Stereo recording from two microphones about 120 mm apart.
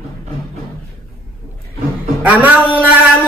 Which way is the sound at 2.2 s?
15° right (ahead or behind).